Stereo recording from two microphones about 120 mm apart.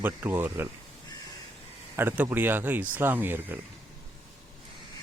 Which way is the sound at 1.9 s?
15° right (ahead or behind).